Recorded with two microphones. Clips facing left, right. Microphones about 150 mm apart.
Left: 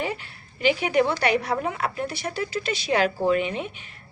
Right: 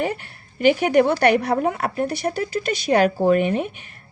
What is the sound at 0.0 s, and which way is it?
A woman's voice, 55° right (ahead or behind).